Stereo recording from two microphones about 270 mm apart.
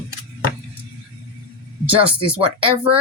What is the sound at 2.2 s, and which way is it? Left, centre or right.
Speech, centre.